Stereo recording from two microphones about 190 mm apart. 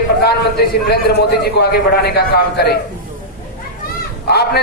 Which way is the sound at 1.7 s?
55° left (ahead or behind).